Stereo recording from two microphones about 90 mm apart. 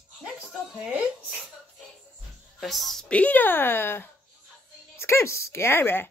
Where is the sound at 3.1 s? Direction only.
15° left (ahead or behind).